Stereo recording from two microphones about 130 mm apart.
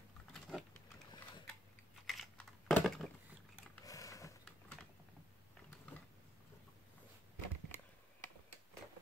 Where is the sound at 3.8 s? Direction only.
25° left (ahead or behind).